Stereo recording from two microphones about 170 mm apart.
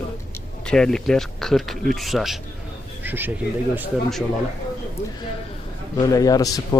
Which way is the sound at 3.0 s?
10° right (ahead or behind).